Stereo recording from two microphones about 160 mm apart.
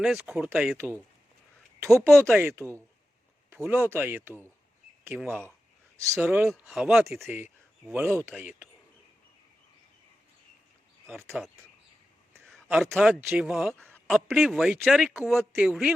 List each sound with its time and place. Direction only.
0.0 s speech: 5° right (ahead or behind)
2.3 s speech: 15° right (ahead or behind)
7.2 s speech: 15° right (ahead or behind)
11.4 s speech: 5° right (ahead or behind)
12.5 s a sound: 5° left (ahead or behind)
12.7 s speech: centre (ahead or behind)